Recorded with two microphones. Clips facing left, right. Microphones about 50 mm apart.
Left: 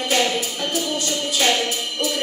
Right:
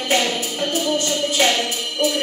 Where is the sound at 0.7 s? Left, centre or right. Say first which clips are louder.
Right 4 dB; right.